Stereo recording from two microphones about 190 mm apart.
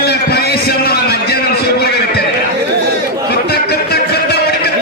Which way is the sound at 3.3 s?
55° left (ahead or behind).